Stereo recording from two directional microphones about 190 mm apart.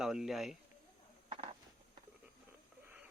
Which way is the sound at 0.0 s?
Centre (ahead or behind).